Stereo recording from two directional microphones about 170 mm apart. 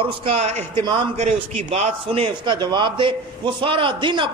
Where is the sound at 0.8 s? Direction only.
25° right (ahead or behind).